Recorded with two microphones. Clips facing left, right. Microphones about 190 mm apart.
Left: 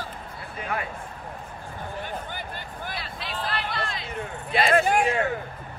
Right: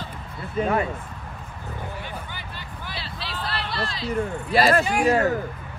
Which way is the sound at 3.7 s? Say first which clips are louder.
Right 3 dB; 35° right (ahead or behind).